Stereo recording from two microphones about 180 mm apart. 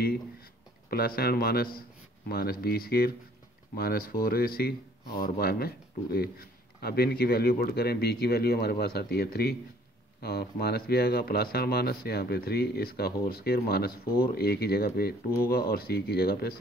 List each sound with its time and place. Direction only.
0.0 s speech: 60° left (ahead or behind)